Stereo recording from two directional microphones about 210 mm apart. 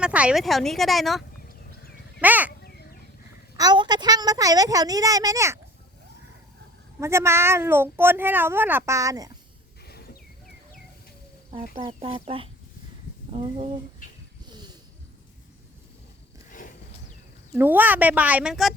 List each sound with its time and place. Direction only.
0.0 s speech: 5° right (ahead or behind)
2.2 s speech: 10° right (ahead or behind)
3.6 s speech: 20° right (ahead or behind)
7.0 s speech: 10° right (ahead or behind)
9.8 s a sound: 50° left (ahead or behind)
11.9 s speech: 30° right (ahead or behind)
14.5 s a sound: 20° right (ahead or behind)
16.5 s a sound: 40° left (ahead or behind)
17.5 s speech: 10° right (ahead or behind)